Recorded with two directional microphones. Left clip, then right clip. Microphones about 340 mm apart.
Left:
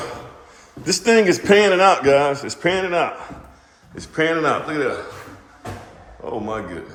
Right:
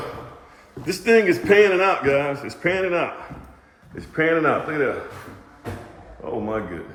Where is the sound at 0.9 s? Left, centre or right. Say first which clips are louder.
Left 2 dB; centre.